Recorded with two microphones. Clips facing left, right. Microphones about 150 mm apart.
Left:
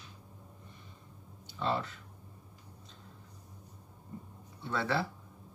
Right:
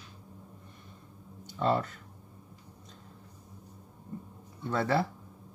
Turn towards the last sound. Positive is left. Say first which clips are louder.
# right 4 dB
turn(degrees=-45)  # may be behind; listen again after turning